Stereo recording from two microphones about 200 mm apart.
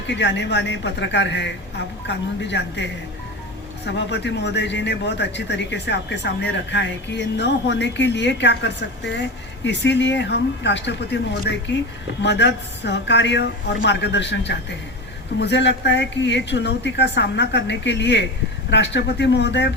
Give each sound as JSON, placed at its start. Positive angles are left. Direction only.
{"t": 0.2, "sound": "a man's voice", "side_deg": 60}